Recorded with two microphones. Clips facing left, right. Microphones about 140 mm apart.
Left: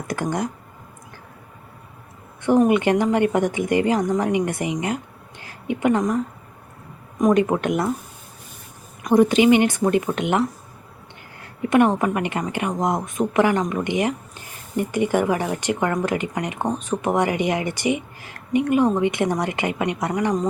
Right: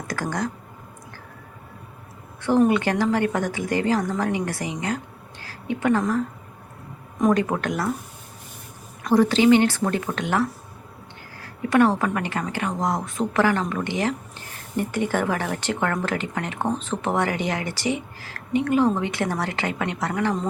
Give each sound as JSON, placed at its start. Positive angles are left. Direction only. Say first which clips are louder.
{"t": 0.1, "sound": "speech", "louder": "left 3 dB", "side_deg": 20}
{"t": 2.4, "sound": "a woman's voice", "louder": "left 2 dB", "side_deg": 15}
{"t": 9.0, "sound": "speech", "louder": "left 2 dB", "side_deg": 20}